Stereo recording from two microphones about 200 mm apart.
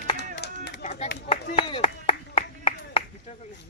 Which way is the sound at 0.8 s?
35° left (ahead or behind).